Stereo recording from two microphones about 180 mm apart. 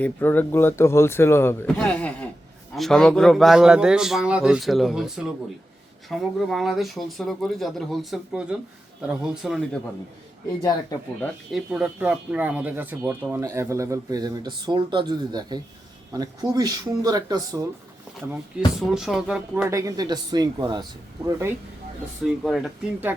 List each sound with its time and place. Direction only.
0.0 s a man's voice: 10° left (ahead or behind)
11.2 s a man's voice: 5° right (ahead or behind)
19.6 s speech: 20° right (ahead or behind)
22.4 s a man's voice: centre (ahead or behind)